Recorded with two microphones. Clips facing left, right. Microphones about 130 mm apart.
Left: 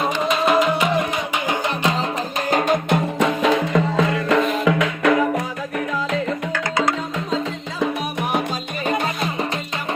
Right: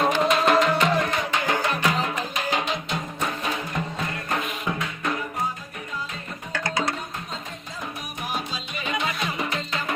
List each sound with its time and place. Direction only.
0.0 s music: 5° left (ahead or behind)
1.5 s music: 20° left (ahead or behind)
2.5 s music: 45° left (ahead or behind)
3.2 s music: 90° left